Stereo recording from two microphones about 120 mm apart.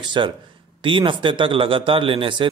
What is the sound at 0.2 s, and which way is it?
Speech, 40° right (ahead or behind).